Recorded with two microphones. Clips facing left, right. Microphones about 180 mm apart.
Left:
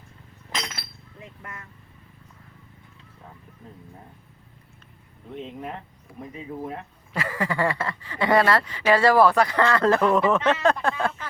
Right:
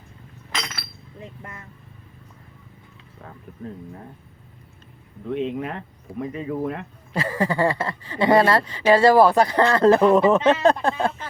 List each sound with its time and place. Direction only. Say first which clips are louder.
1.4 s vehicle: right 1 dB; 30° right (ahead or behind)
5.2 s speech: right 9 dB; 80° right
7.1 s speech: right 4 dB; 30° right (ahead or behind)